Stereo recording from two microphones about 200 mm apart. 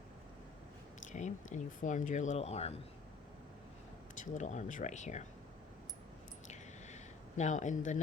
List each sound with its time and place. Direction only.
1.0 s speech: 35° left (ahead or behind)
4.1 s speech: 40° left (ahead or behind)
6.5 s a sound: 35° left (ahead or behind)